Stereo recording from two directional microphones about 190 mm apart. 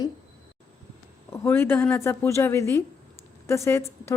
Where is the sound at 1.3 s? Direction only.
15° left (ahead or behind).